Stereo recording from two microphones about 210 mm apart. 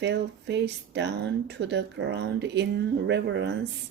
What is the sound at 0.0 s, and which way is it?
Speech, 55° right (ahead or behind).